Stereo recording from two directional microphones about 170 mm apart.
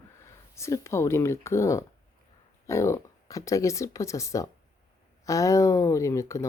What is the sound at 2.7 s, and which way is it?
Speech, 15° left (ahead or behind).